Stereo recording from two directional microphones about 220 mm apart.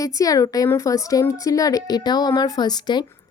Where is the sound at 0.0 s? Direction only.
15° left (ahead or behind).